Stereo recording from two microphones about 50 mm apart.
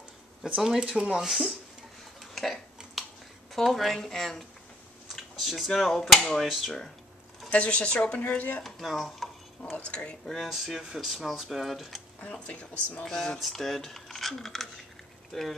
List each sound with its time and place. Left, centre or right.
0.6 s speech: centre
0.9 s speech: centre
1.2 s speech: centre
2.3 s burping: centre
3.5 s speech: centre
7.5 s a woman's voice: left
8.2 s speech: left
8.6 s speech: centre
9.8 s a woman's voice: left
10.4 s speech: centre
12.2 s a woman's voice: left
13.1 s speech: centre